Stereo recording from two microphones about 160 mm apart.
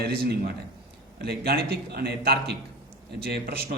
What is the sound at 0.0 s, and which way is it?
A man's voice, 80° right.